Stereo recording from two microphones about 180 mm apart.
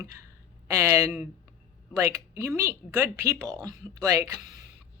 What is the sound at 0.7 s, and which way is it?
Speech, 15° right (ahead or behind).